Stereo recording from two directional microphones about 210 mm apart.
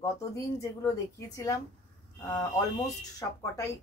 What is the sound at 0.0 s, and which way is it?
Speech, 15° left (ahead or behind).